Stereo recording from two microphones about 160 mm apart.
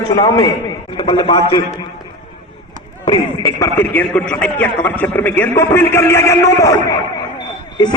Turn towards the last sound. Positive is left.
turn(degrees=25)  # may be behind; listen again after turning